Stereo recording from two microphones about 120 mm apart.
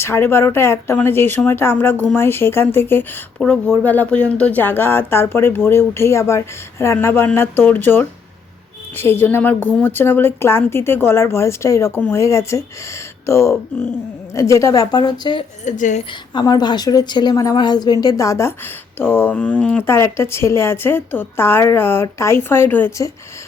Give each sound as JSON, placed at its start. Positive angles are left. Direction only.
{"t": 0.0, "sound": "a woman's voice", "side_deg": 20}
{"t": 15.6, "sound": "speech", "side_deg": 90}
{"t": 16.3, "sound": "a woman's voice", "side_deg": 35}
{"t": 20.0, "sound": "a woman's voice", "side_deg": 20}